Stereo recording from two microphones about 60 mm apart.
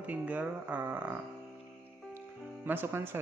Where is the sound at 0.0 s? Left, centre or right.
Right.